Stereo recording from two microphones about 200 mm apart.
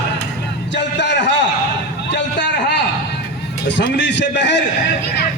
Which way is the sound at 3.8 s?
60° left (ahead or behind).